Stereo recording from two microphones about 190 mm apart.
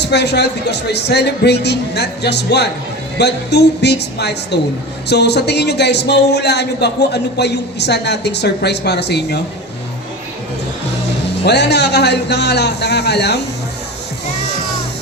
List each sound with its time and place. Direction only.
0.0 s speech: 60° left (ahead or behind)
11.4 s speech: 60° left (ahead or behind)